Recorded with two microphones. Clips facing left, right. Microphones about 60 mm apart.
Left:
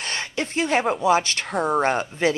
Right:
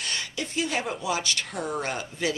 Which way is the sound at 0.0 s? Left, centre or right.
Left.